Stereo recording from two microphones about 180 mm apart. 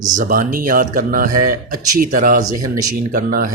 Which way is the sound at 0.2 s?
50° right (ahead or behind).